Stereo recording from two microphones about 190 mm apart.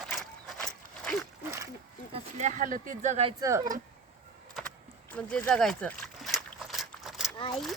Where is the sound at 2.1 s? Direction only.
40° right (ahead or behind).